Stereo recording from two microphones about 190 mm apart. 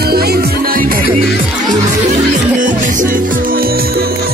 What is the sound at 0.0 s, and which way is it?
Music, 55° right (ahead or behind).